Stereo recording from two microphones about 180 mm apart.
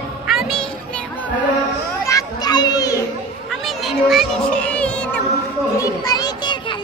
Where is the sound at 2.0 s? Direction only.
20° left (ahead or behind).